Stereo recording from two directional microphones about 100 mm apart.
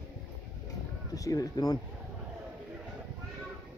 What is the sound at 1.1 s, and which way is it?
Speech, 35° left (ahead or behind).